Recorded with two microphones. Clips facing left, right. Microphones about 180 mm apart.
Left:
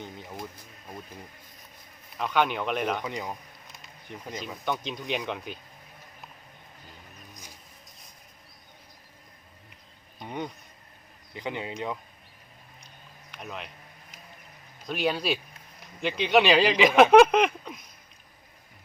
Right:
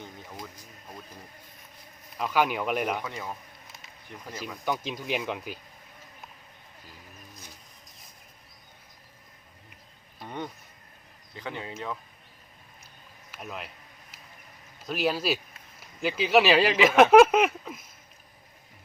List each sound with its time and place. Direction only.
0.0 s speech: 20° left (ahead or behind)
2.1 s speech: 5° right (ahead or behind)
3.0 s speech: 15° left (ahead or behind)
4.4 s speech: 5° right (ahead or behind)
10.2 s speech: 10° left (ahead or behind)
13.3 s speech: 5° right (ahead or behind)
14.8 s speech: centre (ahead or behind)